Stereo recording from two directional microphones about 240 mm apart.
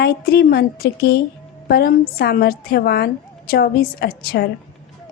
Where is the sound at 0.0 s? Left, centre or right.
Left.